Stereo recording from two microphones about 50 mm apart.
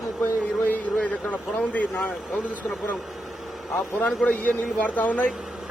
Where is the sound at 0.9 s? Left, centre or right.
Left.